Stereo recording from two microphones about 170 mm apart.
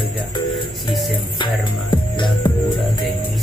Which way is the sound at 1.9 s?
25° left (ahead or behind).